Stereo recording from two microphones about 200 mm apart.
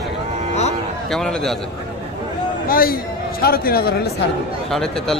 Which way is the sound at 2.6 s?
45° left (ahead or behind).